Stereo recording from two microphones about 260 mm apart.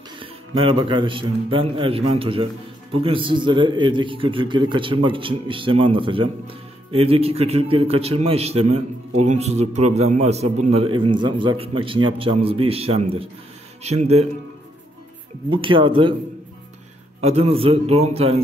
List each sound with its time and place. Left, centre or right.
0.2 s a man's voice: centre
15.5 s a man's voice: centre
17.2 s a man's voice: right